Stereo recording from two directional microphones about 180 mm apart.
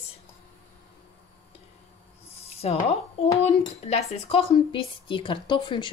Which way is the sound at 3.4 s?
35° left (ahead or behind).